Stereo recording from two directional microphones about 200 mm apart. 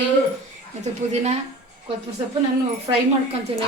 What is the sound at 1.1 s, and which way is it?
Speech, 35° right (ahead or behind).